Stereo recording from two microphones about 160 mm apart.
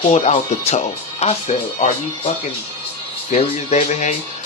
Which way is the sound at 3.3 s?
45° left (ahead or behind).